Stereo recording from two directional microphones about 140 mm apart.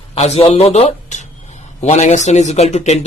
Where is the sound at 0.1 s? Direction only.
50° left (ahead or behind).